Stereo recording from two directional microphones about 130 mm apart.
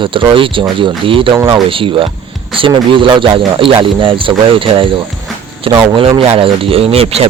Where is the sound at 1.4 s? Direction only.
30° right (ahead or behind).